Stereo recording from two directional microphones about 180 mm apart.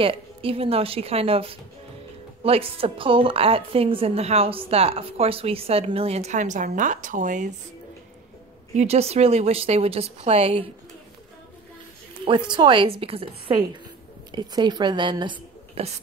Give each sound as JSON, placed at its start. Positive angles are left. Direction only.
{"t": 0.0, "sound": "a woman's voice", "side_deg": -30}
{"t": 8.7, "sound": "a woman's voice", "side_deg": -35}
{"t": 12.3, "sound": "a woman's voice", "side_deg": -25}